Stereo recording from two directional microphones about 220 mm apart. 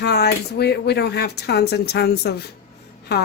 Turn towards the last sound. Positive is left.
turn(degrees=50)  # may be behind; listen again after turning